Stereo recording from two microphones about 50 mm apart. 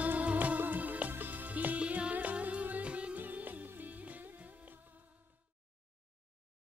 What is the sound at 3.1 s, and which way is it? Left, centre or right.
Music, right.